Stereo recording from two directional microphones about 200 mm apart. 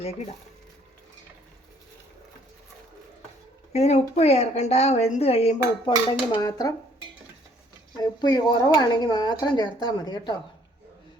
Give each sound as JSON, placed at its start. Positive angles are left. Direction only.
{"t": 3.7, "sound": "a woman's voice", "side_deg": 35}
{"t": 8.2, "sound": "speech", "side_deg": 20}